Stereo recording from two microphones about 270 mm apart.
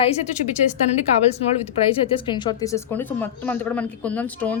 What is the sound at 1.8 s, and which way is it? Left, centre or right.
Speech, centre.